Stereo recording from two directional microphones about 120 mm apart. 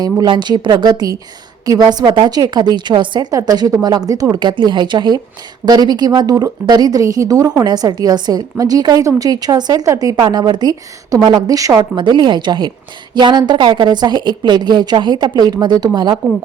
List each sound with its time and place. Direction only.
0.0 s a woman's voice: 35° right (ahead or behind)
11.9 s a woman's voice: 40° right (ahead or behind)